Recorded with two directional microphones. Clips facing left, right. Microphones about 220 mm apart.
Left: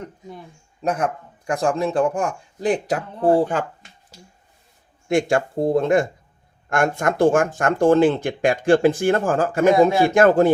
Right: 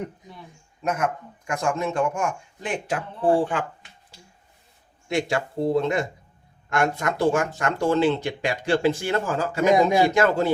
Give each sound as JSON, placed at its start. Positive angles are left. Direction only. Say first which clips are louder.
{"t": 0.8, "sound": "a man's voice", "louder": "left 3 dB", "side_deg": 35}
{"t": 5.0, "sound": "speech", "louder": "left 6 dB", "side_deg": 50}